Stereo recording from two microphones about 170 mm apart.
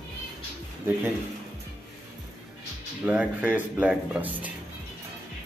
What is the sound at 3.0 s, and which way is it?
Speech, 10° right (ahead or behind).